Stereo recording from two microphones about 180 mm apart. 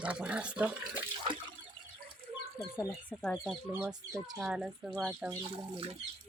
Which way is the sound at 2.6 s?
10° left (ahead or behind).